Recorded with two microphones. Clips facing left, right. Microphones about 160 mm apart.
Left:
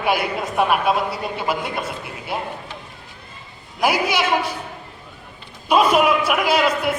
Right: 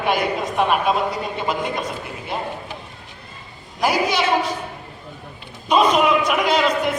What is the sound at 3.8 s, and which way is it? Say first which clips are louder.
Speech: even; 10° left (ahead or behind).